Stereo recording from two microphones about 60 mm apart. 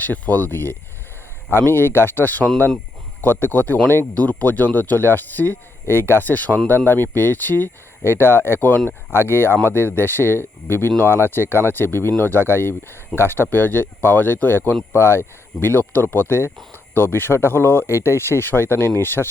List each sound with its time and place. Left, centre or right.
0.0 s speech: left